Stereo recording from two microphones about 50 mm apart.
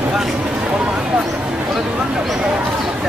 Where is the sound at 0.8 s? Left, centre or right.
Centre.